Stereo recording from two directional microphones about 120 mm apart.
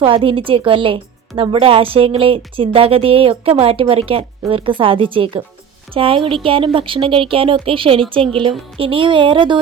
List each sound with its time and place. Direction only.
0.0 s speech: 50° right (ahead or behind)